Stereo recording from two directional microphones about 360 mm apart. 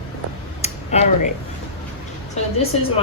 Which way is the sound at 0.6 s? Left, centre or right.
Centre.